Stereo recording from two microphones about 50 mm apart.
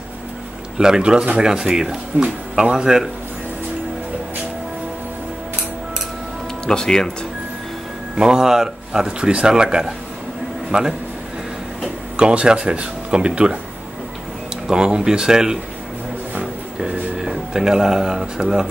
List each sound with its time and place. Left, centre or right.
0.7 s speech: centre
6.6 s speech: centre
8.2 s speech: centre
12.2 s speech: centre
14.7 s speech: centre
17.2 s speech: centre